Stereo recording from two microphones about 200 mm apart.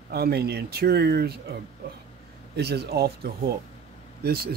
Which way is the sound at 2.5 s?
55° right (ahead or behind).